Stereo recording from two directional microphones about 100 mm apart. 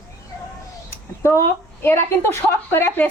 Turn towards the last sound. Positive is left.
turn(degrees=25)  # may be behind; listen again after turning